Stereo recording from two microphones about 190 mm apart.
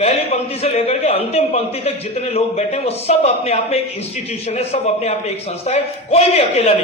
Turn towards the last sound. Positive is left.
turn(degrees=35)  # may be behind; listen again after turning